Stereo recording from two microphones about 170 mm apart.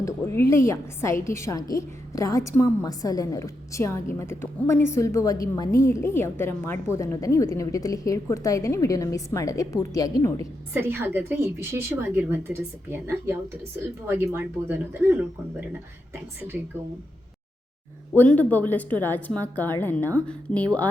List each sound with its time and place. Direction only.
0.0 s a woman's voice: 15° left (ahead or behind)
10.8 s a woman's voice: 10° right (ahead or behind)
18.1 s a woman's voice: 10° left (ahead or behind)